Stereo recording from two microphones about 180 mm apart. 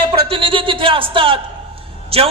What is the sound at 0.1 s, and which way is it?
A man's voice, 30° right (ahead or behind).